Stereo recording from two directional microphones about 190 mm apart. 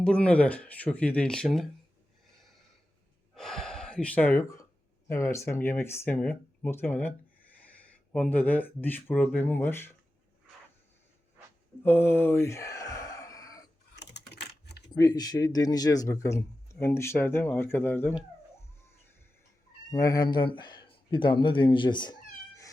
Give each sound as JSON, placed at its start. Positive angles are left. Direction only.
{"t": 0.0, "sound": "speech", "side_deg": 5}
{"t": 3.3, "sound": "speech", "side_deg": 0}
{"t": 11.8, "sound": "a sound", "side_deg": 10}
{"t": 13.9, "sound": "typing", "side_deg": 60}
{"t": 14.9, "sound": "speech", "side_deg": 20}
{"t": 19.9, "sound": "speech", "side_deg": 15}